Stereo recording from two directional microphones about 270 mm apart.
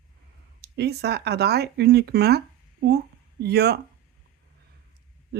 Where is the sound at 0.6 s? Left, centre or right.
Right.